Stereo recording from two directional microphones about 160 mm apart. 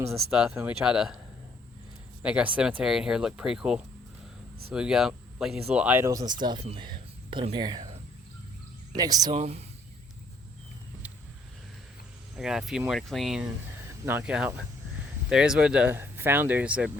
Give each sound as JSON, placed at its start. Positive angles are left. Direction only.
{"t": 0.1, "sound": "speech", "side_deg": -5}
{"t": 2.2, "sound": "speech", "side_deg": -5}
{"t": 9.0, "sound": "speech", "side_deg": -25}
{"t": 9.3, "sound": "speech", "side_deg": -40}
{"t": 12.4, "sound": "speech", "side_deg": -5}
{"t": 14.0, "sound": "speech", "side_deg": -15}